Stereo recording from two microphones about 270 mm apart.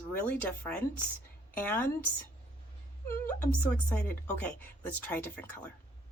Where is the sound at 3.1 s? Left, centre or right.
Centre.